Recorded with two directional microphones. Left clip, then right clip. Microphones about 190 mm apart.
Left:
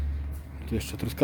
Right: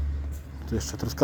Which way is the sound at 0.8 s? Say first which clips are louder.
Right 3 dB; 25° left (ahead or behind).